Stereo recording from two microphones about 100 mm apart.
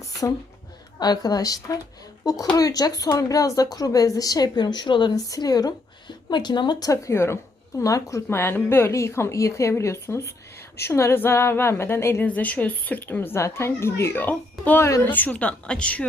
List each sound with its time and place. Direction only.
0.0 s a sound: 35° left (ahead or behind)
0.9 s a woman's voice: 45° left (ahead or behind)
5.3 s a woman's voice: 40° left (ahead or behind); by 16.0 s 10° left (ahead or behind)